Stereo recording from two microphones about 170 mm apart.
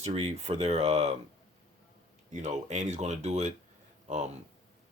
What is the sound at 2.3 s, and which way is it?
Speech, 45° right (ahead or behind).